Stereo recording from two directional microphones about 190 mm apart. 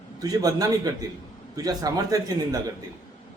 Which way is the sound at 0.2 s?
20° right (ahead or behind).